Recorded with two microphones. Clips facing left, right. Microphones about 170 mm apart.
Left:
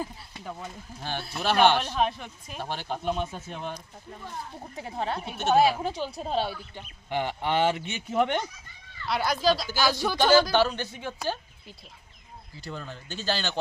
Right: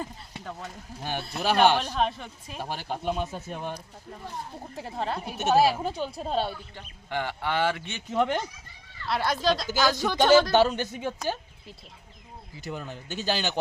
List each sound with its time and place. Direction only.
0.0 s a woman's voice: 5° left (ahead or behind); by 3.8 s 10° right (ahead or behind)
4.7 s a woman's voice: centre (ahead or behind)
6.7 s speech: 15° left (ahead or behind)
9.0 s a woman's voice: centre (ahead or behind)
9.8 s speech: 20° right (ahead or behind)
10.2 s a woman's voice: centre (ahead or behind)
10.8 s speech: 15° right (ahead or behind)
12.6 s speech: 15° right (ahead or behind)